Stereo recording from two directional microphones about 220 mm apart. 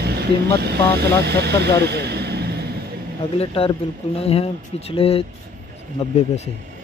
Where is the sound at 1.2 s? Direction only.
50° right (ahead or behind).